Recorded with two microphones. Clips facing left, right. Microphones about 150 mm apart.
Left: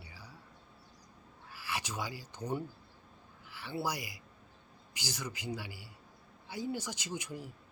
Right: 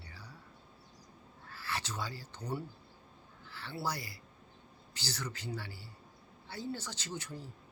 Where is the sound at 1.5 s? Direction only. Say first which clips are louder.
Left 1 dB; 10° left (ahead or behind).